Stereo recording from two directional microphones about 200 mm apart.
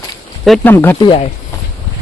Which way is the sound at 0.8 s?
20° left (ahead or behind).